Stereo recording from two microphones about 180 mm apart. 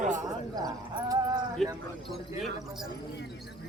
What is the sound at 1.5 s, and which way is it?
Speech, centre (ahead or behind).